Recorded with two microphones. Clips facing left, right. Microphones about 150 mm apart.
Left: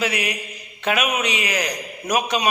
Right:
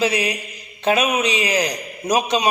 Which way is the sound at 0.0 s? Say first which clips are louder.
Right 4 dB; 30° right (ahead or behind).